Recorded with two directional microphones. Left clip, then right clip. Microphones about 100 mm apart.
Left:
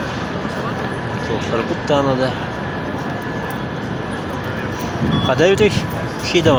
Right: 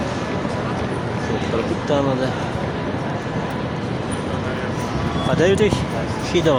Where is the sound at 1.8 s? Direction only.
25° left (ahead or behind).